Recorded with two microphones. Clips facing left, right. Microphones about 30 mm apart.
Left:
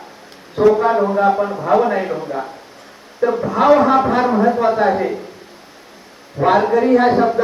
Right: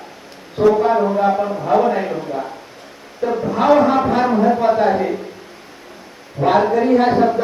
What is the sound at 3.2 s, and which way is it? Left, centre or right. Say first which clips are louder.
Speech: left 2 dB; centre.